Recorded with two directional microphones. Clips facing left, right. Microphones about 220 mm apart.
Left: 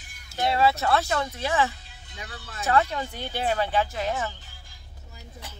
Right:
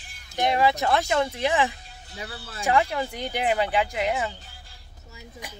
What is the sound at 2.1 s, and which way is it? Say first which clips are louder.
Speech: right 4 dB; 30° right (ahead or behind).